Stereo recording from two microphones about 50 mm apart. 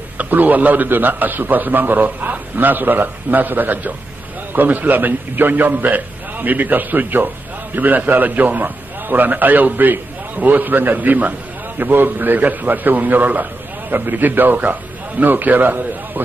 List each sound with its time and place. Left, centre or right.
0.2 s a man's voice: right